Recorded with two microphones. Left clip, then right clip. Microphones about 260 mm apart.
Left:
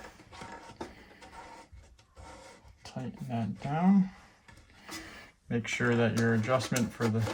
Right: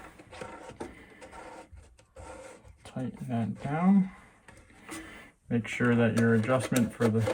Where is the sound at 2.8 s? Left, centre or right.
Left.